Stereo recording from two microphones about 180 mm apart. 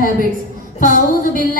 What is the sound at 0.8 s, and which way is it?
Speech, 50° left (ahead or behind).